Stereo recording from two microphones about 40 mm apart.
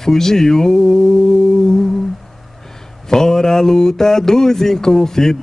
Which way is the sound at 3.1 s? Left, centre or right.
Centre.